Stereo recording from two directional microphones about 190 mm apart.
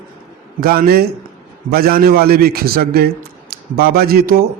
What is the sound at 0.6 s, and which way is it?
A man's voice, 50° right (ahead or behind).